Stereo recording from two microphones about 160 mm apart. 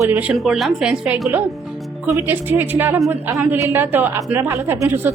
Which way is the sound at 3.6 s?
15° right (ahead or behind).